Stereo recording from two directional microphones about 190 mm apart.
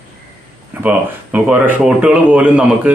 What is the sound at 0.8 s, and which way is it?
Speech, 10° right (ahead or behind).